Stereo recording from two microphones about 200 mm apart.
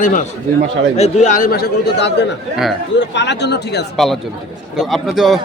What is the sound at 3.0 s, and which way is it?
Speech, 60° left (ahead or behind).